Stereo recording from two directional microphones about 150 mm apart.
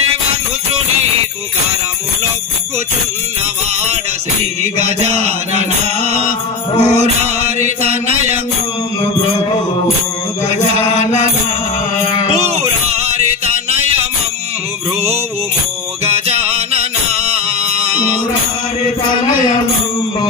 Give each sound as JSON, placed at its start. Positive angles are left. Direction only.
{"t": 4.7, "sound": "mantra", "side_deg": -45}
{"t": 12.3, "sound": "a sound", "side_deg": -45}
{"t": 13.7, "sound": "music", "side_deg": -45}
{"t": 16.1, "sound": "music", "side_deg": -45}